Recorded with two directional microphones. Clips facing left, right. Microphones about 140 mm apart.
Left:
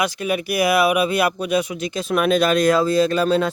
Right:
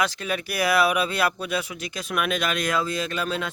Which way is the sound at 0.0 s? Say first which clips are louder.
Left 5 dB; 15° left (ahead or behind).